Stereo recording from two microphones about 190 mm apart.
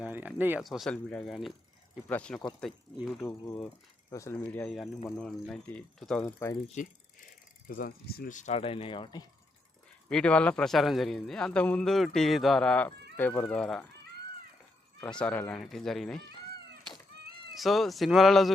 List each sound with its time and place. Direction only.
0.0 s a man's voice: 10° right (ahead or behind); by 6.6 s 10° left (ahead or behind)
7.7 s speech: 50° left (ahead or behind); by 9.2 s 25° left (ahead or behind)
10.1 s a man's voice: 5° left (ahead or behind)
15.2 s a man's voice: 10° left (ahead or behind)
17.6 s a man's voice: centre (ahead or behind)